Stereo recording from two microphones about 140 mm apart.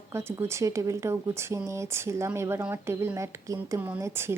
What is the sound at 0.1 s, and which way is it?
A woman's voice, 20° right (ahead or behind).